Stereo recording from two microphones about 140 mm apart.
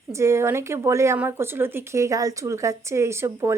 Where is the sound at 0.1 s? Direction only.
20° right (ahead or behind).